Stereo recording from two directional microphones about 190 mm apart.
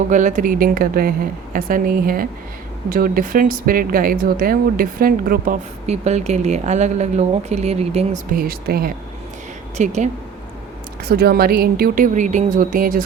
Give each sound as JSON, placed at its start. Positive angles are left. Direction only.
{"t": 0.1, "sound": "speech", "side_deg": -40}
{"t": 5.8, "sound": "speech", "side_deg": -35}
{"t": 8.3, "sound": "speech", "side_deg": -50}
{"t": 9.7, "sound": "speech", "side_deg": -40}
{"t": 11.1, "sound": "speech", "side_deg": -55}